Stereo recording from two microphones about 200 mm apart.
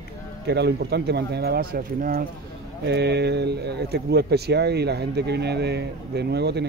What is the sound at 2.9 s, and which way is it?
Speech, 55° right (ahead or behind).